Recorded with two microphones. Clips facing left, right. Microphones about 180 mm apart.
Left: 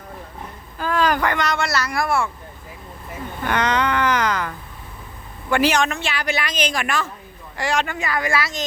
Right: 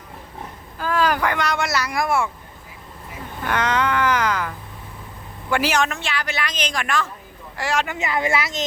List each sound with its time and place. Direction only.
0.8 s speech: 5° right (ahead or behind)
3.4 s speech: 5° right (ahead or behind)
7.9 s a woman's voice: 20° right (ahead or behind)